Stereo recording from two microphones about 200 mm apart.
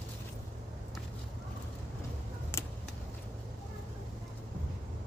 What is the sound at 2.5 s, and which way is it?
Vehicle, 15° left (ahead or behind).